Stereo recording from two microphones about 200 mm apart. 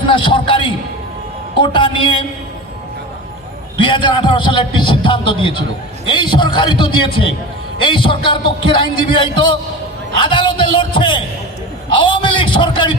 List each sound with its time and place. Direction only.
0.1 s a sound: 25° left (ahead or behind)
1.5 s a man's voice: 25° left (ahead or behind)
3.8 s a man's voice: 25° left (ahead or behind)